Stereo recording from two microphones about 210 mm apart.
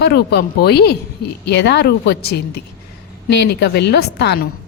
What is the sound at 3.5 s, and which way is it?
Speech, 50° left (ahead or behind).